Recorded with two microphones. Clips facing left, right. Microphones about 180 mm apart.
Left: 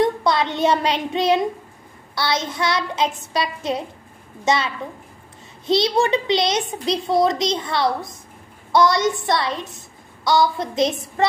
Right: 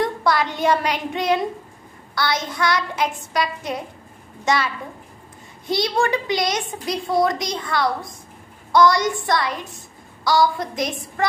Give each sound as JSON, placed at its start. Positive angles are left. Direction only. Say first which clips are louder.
{"t": 0.0, "sound": "a child's voice", "louder": "left 2 dB", "side_deg": 20}